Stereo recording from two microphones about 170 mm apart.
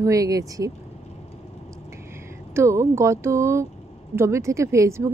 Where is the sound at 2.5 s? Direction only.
15° right (ahead or behind).